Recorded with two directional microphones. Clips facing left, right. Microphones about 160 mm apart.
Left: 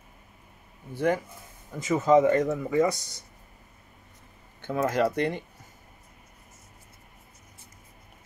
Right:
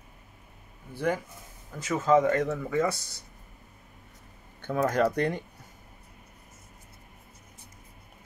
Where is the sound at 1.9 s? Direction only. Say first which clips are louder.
Left 3 dB; 15° left (ahead or behind).